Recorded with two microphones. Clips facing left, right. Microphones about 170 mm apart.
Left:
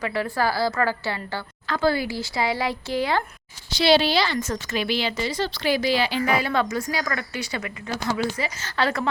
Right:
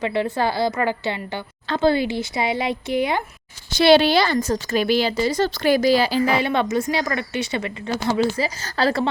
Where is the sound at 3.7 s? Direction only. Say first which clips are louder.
Right 5 dB; 55° right (ahead or behind).